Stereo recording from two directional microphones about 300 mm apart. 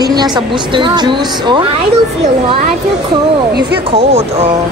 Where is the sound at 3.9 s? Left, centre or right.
Centre.